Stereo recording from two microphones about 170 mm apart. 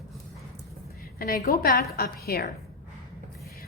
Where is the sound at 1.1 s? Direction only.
60° left (ahead or behind).